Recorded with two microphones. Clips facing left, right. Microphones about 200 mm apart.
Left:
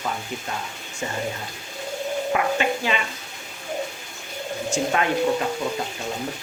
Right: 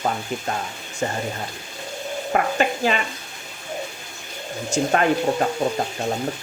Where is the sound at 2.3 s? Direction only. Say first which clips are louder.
Right 3 dB; 45° right (ahead or behind).